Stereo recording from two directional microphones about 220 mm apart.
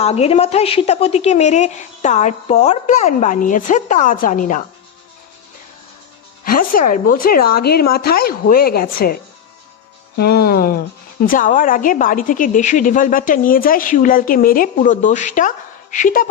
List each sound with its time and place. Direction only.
0.0 s a woman's voice: 30° left (ahead or behind)
6.4 s a woman's voice: 40° left (ahead or behind)
10.2 s a woman's voice: 45° left (ahead or behind)